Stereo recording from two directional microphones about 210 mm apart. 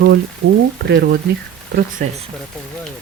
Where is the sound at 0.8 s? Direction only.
50° right (ahead or behind).